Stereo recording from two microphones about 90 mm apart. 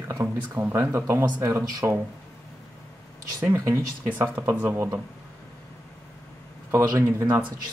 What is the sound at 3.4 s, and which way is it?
Speech, 30° right (ahead or behind).